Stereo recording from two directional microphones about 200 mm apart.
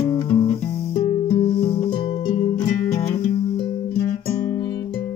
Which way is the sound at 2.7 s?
15° left (ahead or behind).